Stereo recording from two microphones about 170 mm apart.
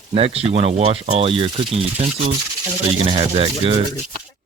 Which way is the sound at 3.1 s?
30° right (ahead or behind).